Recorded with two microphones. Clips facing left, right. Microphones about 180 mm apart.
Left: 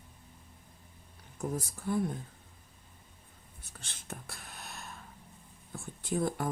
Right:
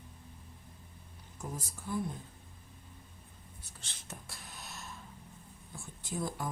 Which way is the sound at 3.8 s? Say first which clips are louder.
Left 4 dB; 55° left (ahead or behind).